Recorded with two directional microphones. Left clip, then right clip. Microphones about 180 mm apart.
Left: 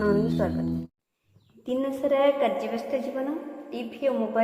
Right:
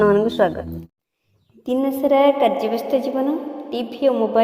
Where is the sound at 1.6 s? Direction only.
25° right (ahead or behind).